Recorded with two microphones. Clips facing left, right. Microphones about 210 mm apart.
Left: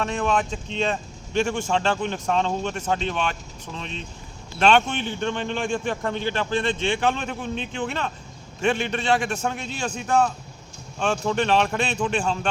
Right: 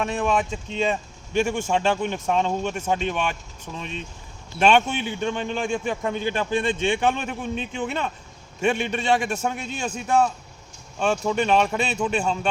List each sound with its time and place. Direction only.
0.0 s speech: 10° right (ahead or behind)